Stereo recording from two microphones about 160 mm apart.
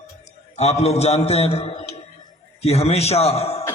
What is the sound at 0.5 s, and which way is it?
A man's voice, 40° left (ahead or behind).